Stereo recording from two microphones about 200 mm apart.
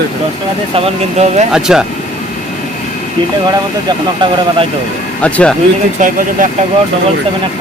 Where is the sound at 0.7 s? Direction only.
35° right (ahead or behind).